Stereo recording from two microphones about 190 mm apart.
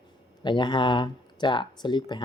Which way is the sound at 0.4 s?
25° left (ahead or behind).